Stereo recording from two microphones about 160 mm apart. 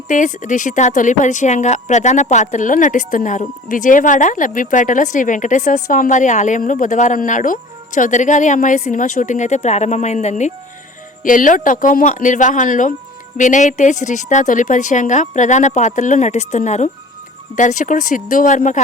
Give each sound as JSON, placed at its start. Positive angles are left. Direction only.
{"t": 0.1, "sound": "a woman's voice", "side_deg": 50}